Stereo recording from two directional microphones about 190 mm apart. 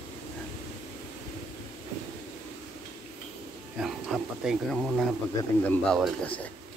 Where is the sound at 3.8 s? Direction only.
Centre (ahead or behind).